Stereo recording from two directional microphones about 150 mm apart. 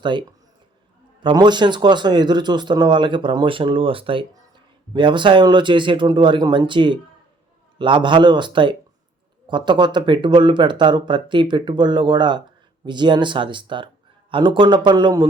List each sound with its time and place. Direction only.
0.0 s a man's voice: 30° right (ahead or behind)